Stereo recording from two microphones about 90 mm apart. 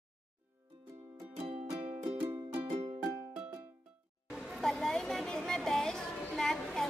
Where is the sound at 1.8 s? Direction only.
70° right (ahead or behind).